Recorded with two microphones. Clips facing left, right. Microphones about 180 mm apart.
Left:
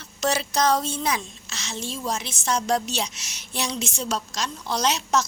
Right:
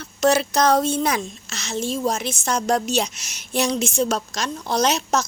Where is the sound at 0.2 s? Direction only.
55° right (ahead or behind).